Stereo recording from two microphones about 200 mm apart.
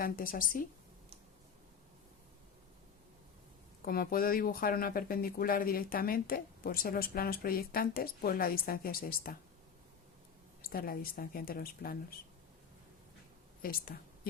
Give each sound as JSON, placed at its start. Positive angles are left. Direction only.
{"t": 0.0, "sound": "speech", "side_deg": 45}
{"t": 3.8, "sound": "speech", "side_deg": 50}
{"t": 10.6, "sound": "speech", "side_deg": 45}
{"t": 13.6, "sound": "speech", "side_deg": 45}